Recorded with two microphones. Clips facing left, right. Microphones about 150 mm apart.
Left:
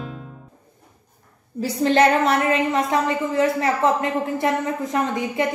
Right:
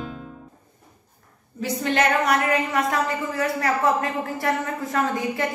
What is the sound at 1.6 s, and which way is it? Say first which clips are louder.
A woman's voice: left 5 dB; 30° left (ahead or behind).